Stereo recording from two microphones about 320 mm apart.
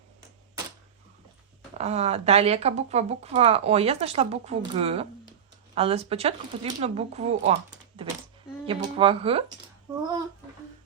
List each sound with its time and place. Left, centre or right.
1.8 s speech: centre